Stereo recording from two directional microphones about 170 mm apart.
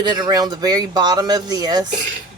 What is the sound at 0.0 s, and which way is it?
Speech, 25° right (ahead or behind).